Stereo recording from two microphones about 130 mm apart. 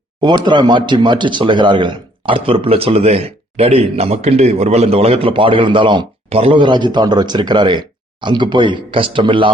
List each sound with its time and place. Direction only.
0.2 s speech: 35° right (ahead or behind)